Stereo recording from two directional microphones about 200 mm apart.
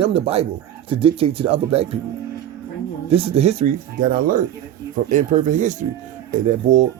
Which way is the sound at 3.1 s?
30° right (ahead or behind).